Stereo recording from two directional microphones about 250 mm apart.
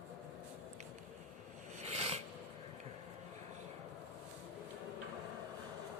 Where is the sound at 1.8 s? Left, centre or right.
Right.